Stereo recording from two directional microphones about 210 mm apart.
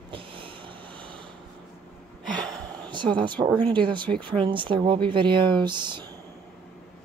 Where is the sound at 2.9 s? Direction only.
20° right (ahead or behind).